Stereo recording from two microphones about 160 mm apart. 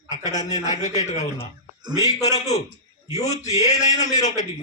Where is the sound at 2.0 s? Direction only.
25° left (ahead or behind).